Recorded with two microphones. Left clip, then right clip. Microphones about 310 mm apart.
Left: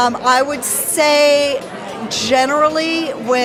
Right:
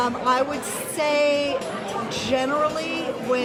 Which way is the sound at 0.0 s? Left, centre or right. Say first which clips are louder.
Left 8 dB; left.